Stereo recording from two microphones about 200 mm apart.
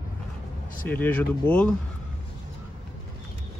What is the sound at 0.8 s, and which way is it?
Speech, 10° left (ahead or behind).